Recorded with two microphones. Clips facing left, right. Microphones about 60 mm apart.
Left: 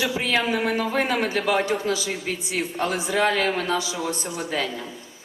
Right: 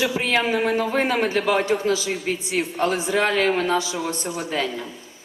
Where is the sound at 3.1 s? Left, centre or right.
Right.